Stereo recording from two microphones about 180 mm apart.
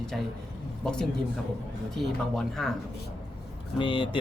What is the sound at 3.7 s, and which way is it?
Speech, 25° left (ahead or behind).